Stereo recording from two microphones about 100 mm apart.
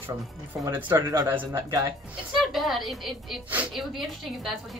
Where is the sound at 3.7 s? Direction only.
Centre (ahead or behind).